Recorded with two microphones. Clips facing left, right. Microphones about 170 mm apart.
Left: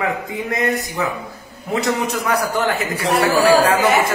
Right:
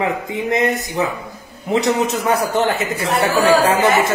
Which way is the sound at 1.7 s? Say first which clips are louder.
Right 3 dB; 20° right (ahead or behind).